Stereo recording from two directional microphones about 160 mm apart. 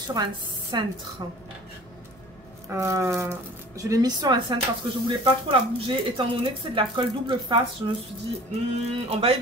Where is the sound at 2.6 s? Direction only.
20° right (ahead or behind).